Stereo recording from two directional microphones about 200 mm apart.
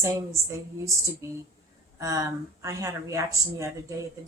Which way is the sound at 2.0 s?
15° right (ahead or behind).